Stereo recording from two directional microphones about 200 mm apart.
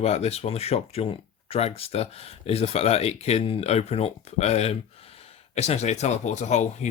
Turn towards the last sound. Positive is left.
turn(degrees=35)  # may be behind; listen again after turning